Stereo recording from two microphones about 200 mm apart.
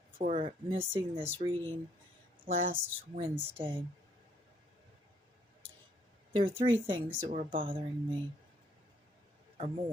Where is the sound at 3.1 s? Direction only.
25° right (ahead or behind).